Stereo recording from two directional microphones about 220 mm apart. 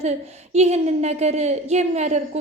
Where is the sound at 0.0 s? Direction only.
30° right (ahead or behind).